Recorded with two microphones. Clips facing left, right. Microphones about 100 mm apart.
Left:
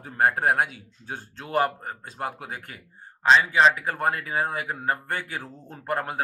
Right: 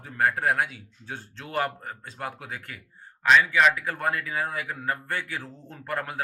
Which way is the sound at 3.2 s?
30° left (ahead or behind).